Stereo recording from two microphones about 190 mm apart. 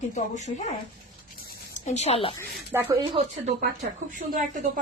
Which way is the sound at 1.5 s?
40° left (ahead or behind).